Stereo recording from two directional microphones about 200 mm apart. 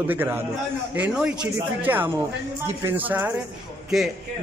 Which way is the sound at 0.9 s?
5° right (ahead or behind).